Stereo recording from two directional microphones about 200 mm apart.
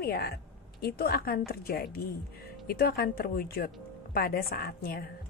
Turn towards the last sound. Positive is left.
turn(degrees=45)  # may be behind; listen again after turning